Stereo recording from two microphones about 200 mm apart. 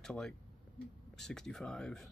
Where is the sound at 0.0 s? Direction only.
5° left (ahead or behind).